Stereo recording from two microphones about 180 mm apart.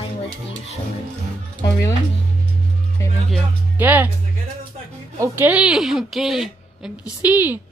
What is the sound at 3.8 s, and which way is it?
Speech, 10° right (ahead or behind).